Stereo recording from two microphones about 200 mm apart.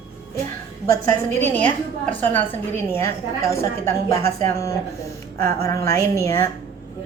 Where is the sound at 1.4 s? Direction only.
10° left (ahead or behind).